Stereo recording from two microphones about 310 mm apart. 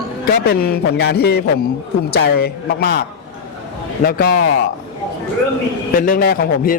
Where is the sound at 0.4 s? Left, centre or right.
Left.